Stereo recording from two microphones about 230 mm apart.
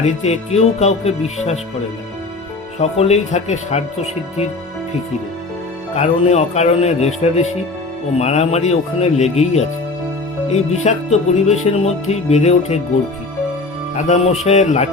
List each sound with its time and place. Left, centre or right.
0.0 s music: left
2.7 s music: left
6.0 s music: left
13.9 s music: left